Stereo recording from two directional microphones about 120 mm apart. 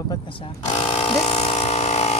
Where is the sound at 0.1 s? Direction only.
45° left (ahead or behind).